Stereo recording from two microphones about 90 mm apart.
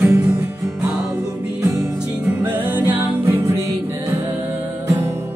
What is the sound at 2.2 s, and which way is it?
Music, 20° right (ahead or behind).